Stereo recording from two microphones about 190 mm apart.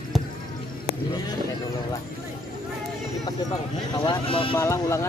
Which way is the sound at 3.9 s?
25° left (ahead or behind).